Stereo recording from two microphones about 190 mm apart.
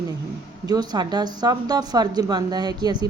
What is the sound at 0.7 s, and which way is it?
A woman's voice, 20° right (ahead or behind).